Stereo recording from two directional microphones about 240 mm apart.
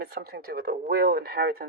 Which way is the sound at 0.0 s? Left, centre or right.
Right.